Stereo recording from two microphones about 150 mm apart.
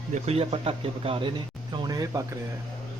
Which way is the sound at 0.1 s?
40° right (ahead or behind).